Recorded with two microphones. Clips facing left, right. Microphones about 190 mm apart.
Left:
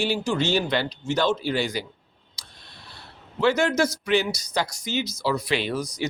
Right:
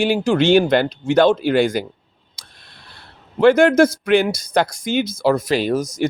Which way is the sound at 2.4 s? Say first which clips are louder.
Right 1 dB; 50° right (ahead or behind).